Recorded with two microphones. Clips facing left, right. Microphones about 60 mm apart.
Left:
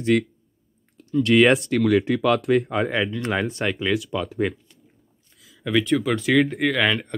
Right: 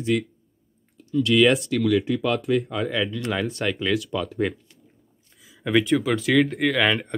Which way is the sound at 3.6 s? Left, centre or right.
Centre.